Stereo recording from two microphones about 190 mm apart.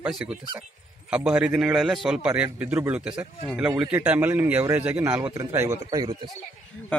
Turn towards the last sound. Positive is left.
turn(degrees=-20)  # may be behind; listen again after turning